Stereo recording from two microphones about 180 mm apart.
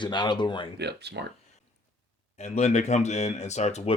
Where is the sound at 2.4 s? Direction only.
40° left (ahead or behind).